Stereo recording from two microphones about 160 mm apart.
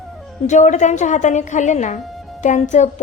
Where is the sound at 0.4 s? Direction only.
50° left (ahead or behind).